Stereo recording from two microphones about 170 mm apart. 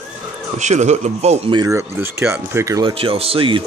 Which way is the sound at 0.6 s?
45° right (ahead or behind).